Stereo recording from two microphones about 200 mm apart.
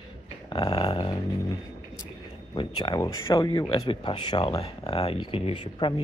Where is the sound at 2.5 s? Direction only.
20° left (ahead or behind).